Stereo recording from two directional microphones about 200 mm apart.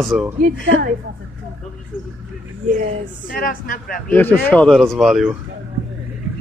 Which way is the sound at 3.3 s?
45° left (ahead or behind).